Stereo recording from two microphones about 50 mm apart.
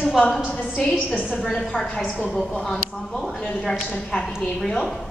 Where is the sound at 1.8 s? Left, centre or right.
Centre.